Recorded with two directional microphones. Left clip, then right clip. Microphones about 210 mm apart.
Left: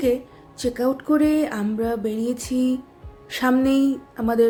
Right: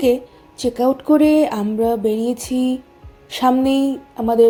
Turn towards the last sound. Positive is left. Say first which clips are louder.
# right 6 dB
turn(degrees=-10)  # may be behind; listen again after turning